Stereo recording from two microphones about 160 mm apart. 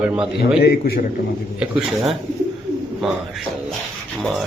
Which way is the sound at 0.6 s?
75° left (ahead or behind).